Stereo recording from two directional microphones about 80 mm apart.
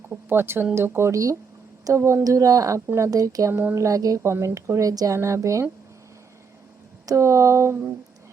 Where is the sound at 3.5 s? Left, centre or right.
Right.